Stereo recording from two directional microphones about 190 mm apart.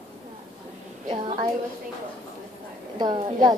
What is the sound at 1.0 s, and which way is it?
Speech, 30° right (ahead or behind).